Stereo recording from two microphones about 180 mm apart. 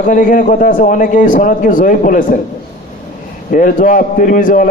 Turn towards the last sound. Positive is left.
turn(degrees=50)  # may be behind; listen again after turning